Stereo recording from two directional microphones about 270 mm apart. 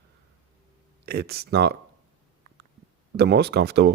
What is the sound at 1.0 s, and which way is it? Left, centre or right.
Speech, right.